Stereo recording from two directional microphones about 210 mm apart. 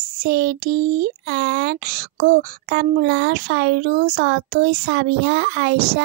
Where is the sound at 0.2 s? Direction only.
45° right (ahead or behind).